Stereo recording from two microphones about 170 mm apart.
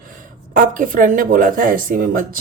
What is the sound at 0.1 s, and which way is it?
Speech, 55° right (ahead or behind).